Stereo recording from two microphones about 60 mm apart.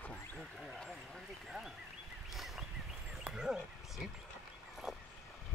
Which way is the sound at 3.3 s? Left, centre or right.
Centre.